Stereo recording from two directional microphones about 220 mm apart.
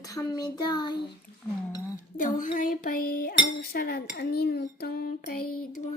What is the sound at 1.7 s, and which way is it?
Dishes, 15° left (ahead or behind).